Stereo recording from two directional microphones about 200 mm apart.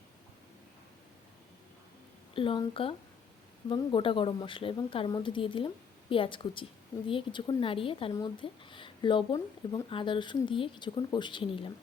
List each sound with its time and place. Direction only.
2.3 s speech: 25° left (ahead or behind)